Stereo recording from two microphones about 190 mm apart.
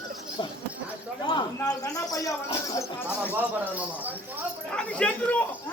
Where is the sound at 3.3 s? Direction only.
10° right (ahead or behind).